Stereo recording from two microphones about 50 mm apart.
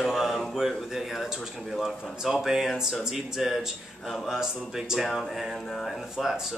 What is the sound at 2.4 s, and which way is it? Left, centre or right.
A man's voice, centre.